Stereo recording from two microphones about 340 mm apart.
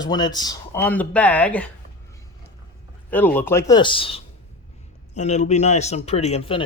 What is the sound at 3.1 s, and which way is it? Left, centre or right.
A man's voice, centre.